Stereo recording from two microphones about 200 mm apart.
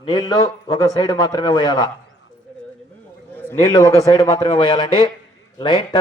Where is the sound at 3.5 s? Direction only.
20° left (ahead or behind).